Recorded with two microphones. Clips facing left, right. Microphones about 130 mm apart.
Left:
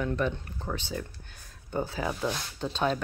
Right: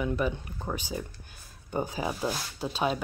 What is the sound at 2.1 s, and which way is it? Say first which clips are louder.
Speech: even; 5° right (ahead or behind).